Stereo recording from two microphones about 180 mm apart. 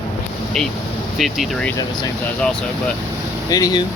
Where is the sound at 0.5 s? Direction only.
Centre (ahead or behind).